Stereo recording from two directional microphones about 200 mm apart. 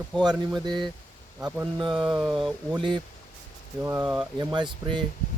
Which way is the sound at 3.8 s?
10° right (ahead or behind).